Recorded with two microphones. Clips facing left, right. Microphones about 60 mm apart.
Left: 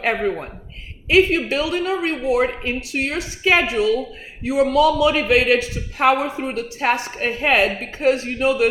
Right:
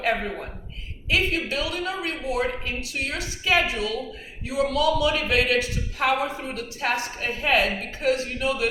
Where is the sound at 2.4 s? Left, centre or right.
Left.